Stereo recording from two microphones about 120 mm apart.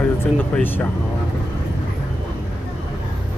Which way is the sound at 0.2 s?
15° left (ahead or behind).